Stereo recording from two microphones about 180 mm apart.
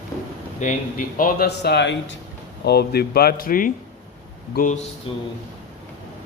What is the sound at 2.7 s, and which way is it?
Speech, 60° left (ahead or behind).